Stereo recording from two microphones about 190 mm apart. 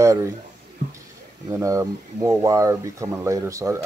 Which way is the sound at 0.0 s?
15° right (ahead or behind).